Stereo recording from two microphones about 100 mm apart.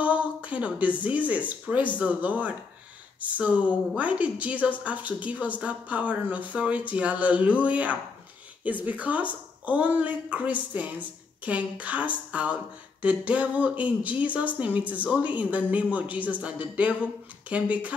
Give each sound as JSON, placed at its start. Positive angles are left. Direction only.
{"t": 0.0, "sound": "a woman's voice", "side_deg": -15}